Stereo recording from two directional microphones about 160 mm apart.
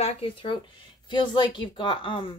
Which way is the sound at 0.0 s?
35° left (ahead or behind).